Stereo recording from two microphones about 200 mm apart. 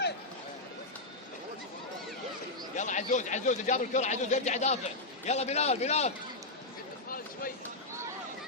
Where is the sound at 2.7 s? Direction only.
40° left (ahead or behind).